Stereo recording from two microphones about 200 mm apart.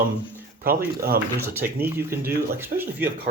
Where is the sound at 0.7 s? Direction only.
50° right (ahead or behind).